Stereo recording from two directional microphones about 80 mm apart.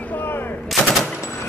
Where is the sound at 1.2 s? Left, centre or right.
Left.